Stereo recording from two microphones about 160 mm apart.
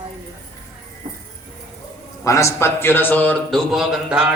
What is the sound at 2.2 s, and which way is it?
A man's voice, 20° left (ahead or behind).